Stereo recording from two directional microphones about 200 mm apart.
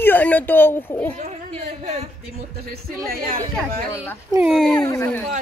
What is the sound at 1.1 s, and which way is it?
Speech, 35° right (ahead or behind).